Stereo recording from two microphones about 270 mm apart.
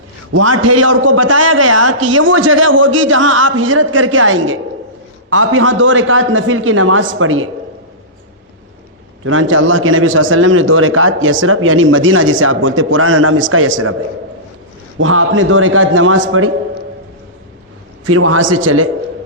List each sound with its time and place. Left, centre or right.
0.3 s a man's voice: right
2.0 s a man's voice: right
9.2 s a man's voice: right
14.9 s a man's voice: right
18.0 s a man's voice: right